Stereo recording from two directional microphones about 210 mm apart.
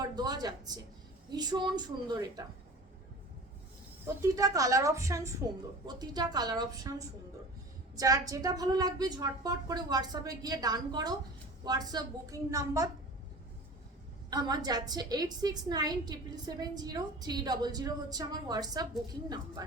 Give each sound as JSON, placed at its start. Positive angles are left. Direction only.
{"t": 0.2, "sound": "a woman's voice", "side_deg": -20}
{"t": 4.0, "sound": "a woman's voice", "side_deg": -15}
{"t": 7.9, "sound": "a woman's voice", "side_deg": -15}
{"t": 14.3, "sound": "a woman's voice", "side_deg": -20}